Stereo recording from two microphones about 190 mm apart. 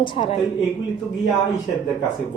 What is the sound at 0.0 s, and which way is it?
Speech, 25° left (ahead or behind).